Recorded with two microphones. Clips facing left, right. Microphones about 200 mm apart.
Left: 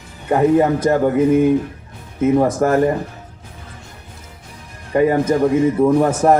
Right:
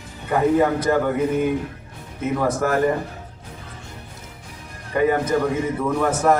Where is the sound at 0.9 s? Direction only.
35° left (ahead or behind).